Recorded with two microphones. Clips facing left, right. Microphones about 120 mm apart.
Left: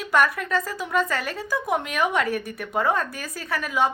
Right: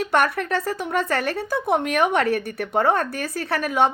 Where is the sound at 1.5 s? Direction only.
30° right (ahead or behind).